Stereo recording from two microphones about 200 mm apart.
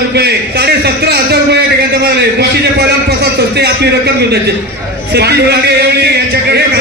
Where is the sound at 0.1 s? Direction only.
55° right (ahead or behind).